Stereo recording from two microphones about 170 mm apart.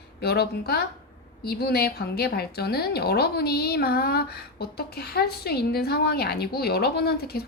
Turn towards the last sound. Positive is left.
turn(degrees=65)  # may be behind; listen again after turning